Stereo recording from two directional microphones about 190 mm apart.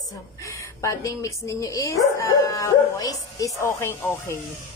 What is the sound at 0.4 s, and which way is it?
Speech, 15° left (ahead or behind).